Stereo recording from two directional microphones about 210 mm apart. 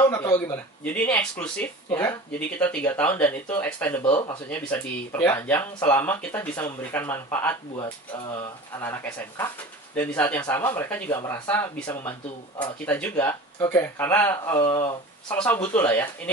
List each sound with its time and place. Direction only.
0.0 s speech: 10° left (ahead or behind)
15.2 s speech: 5° left (ahead or behind)